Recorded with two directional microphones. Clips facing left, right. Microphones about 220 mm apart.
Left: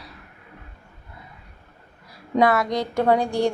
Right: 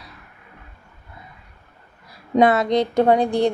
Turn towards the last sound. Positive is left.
turn(degrees=-20)  # may be behind; listen again after turning